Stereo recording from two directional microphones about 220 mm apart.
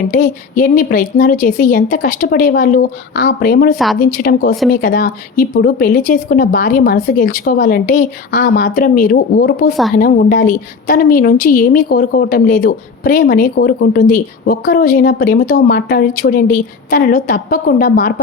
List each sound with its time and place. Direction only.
0.1 s a woman's voice: 35° left (ahead or behind)